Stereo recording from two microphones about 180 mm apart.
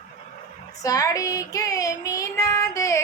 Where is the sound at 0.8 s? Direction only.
20° left (ahead or behind).